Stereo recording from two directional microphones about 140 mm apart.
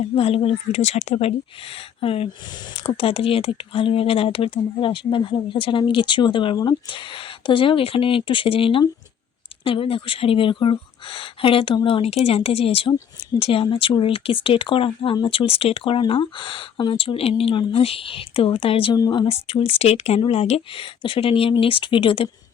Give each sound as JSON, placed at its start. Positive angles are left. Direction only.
{"t": 0.2, "sound": "speech", "side_deg": 45}
{"t": 18.9, "sound": "speech", "side_deg": 30}